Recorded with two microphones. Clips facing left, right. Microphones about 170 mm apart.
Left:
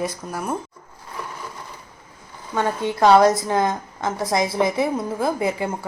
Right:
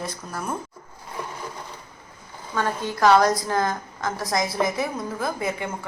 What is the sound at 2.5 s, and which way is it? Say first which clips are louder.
A woman's voice: left 4 dB; 25° left (ahead or behind).